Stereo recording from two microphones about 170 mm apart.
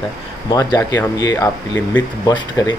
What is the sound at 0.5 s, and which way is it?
Speech, 20° left (ahead or behind).